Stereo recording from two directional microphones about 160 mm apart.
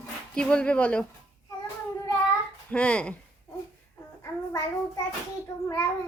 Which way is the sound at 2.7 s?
5° left (ahead or behind).